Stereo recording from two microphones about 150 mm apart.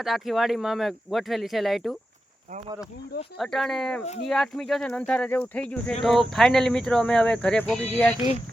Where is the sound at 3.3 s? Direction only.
Centre (ahead or behind).